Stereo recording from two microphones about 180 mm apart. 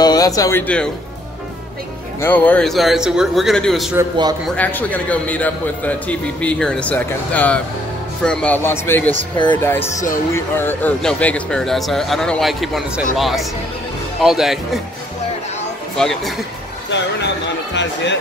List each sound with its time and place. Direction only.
0.0 s speech: 20° left (ahead or behind)
2.2 s a man's voice: 10° left (ahead or behind)
16.0 s speech: 5° left (ahead or behind)
16.9 s speech: 80° left